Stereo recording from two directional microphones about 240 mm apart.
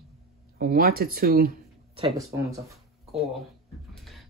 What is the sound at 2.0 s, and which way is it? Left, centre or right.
Speech, centre.